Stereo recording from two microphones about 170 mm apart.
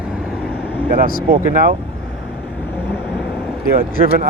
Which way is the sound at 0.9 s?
60° right (ahead or behind).